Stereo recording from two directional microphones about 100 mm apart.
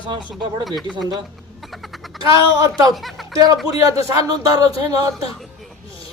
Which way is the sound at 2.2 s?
35° right (ahead or behind).